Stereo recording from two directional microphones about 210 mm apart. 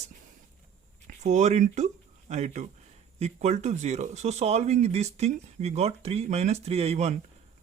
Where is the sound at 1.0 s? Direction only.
35° right (ahead or behind).